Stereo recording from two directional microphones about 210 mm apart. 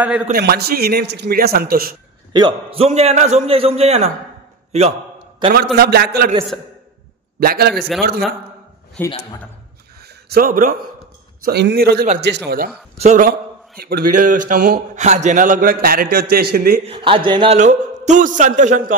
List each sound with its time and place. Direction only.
0.0 s a man's voice: 10° right (ahead or behind)
0.3 s a man's voice: 50° right (ahead or behind)
2.3 s a man's voice: 25° right (ahead or behind)
5.4 s a man's voice: 20° right (ahead or behind)
5.8 s a man's voice: 45° right (ahead or behind)
7.3 s a man's voice: 45° right (ahead or behind)
9.0 s a man's voice: 10° left (ahead or behind)
9.9 s a sound: 50° right (ahead or behind)
11.4 s a man's voice: 50° right (ahead or behind)
12.9 s a man's voice: 35° right (ahead or behind)
13.7 s a man's voice: 45° right (ahead or behind)
16.8 s a man's voice: 25° right (ahead or behind)
17.6 s a man's voice: 35° right (ahead or behind)